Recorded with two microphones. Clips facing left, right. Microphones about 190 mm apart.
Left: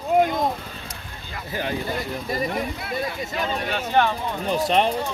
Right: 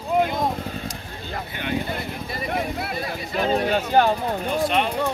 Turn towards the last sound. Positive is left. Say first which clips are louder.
# left 1 dB
turn(degrees=40)  # may be behind; listen again after turning